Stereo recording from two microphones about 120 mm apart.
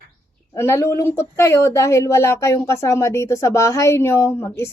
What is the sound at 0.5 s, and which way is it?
A woman's voice, 20° left (ahead or behind).